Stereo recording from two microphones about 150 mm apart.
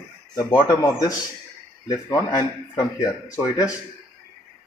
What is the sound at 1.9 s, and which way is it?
Speech, 25° left (ahead or behind).